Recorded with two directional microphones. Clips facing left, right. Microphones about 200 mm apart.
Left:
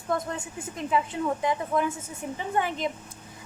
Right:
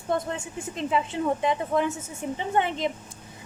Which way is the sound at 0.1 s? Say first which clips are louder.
Right 2 dB; 25° right (ahead or behind).